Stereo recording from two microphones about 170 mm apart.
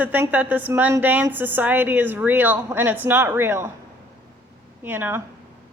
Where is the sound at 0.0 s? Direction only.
10° right (ahead or behind).